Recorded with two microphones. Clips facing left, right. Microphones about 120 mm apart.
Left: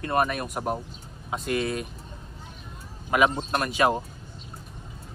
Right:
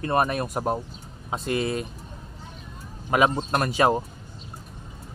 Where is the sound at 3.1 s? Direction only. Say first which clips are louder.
Right 1 dB; 40° right (ahead or behind).